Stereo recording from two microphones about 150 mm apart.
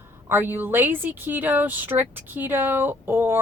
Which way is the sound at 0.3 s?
15° right (ahead or behind).